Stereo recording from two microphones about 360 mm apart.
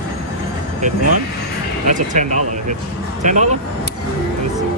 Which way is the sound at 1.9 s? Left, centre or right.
Right.